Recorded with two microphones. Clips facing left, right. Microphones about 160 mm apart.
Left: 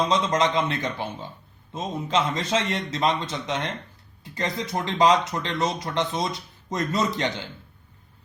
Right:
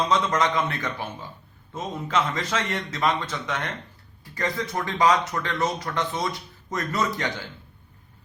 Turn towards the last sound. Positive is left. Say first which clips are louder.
# left 2 dB
turn(degrees=25)  # may be behind; listen again after turning